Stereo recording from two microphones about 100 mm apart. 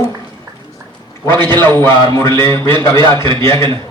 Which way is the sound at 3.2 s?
55° right (ahead or behind).